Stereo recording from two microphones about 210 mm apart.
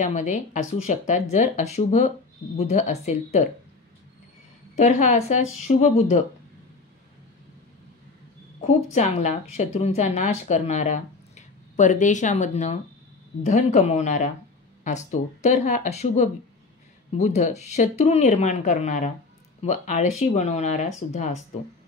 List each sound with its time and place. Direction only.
0.0 s a woman's voice: 35° left (ahead or behind)
4.7 s a woman's voice: 35° left (ahead or behind)
8.5 s a woman's voice: 35° left (ahead or behind)